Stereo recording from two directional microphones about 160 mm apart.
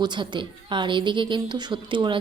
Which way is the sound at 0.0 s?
30° right (ahead or behind).